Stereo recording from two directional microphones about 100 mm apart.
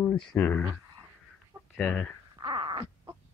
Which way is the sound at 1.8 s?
10° left (ahead or behind).